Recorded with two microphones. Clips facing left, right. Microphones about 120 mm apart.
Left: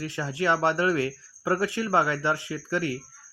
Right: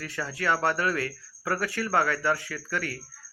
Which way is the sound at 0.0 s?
20° left (ahead or behind).